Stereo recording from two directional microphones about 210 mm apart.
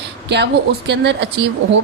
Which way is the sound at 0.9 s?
55° right (ahead or behind).